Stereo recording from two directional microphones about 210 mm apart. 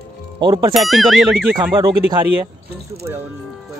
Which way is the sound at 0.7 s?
Centre (ahead or behind).